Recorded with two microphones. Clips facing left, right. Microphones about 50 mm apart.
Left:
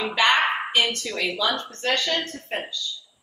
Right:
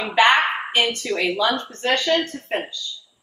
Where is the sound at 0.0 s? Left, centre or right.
Right.